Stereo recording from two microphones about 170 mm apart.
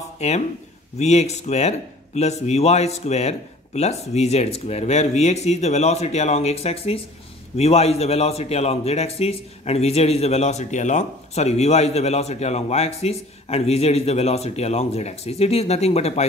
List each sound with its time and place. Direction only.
0.2 s a man's voice: 40° left (ahead or behind)